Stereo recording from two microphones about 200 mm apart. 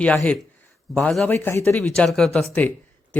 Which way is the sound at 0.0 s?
5° left (ahead or behind).